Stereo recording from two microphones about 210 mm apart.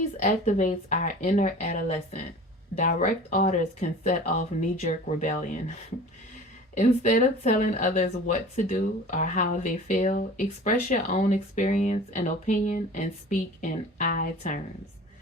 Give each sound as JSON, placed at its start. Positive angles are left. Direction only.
{"t": 0.2, "sound": "speech", "side_deg": 35}
{"t": 6.7, "sound": "speech", "side_deg": 35}